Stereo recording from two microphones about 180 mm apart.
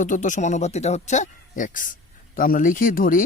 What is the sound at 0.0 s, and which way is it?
A man's voice, 45° left (ahead or behind).